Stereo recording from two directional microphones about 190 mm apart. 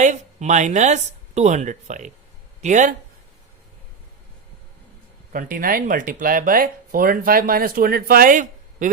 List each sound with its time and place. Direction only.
0.0 s speech: 40° right (ahead or behind)
5.3 s speech: 45° right (ahead or behind)